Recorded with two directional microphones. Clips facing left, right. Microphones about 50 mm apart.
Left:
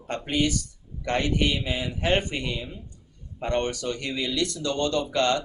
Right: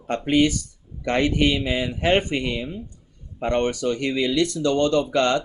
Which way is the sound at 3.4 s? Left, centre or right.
Right.